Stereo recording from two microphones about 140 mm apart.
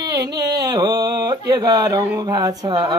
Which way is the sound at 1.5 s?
25° right (ahead or behind).